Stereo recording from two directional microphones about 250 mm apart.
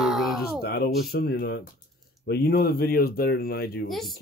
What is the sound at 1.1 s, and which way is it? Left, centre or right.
Speech, left.